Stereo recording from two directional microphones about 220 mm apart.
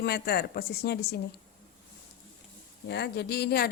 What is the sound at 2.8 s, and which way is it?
Speech, 50° left (ahead or behind).